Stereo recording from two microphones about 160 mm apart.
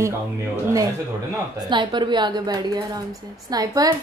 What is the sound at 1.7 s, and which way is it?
A woman's voice, 30° right (ahead or behind).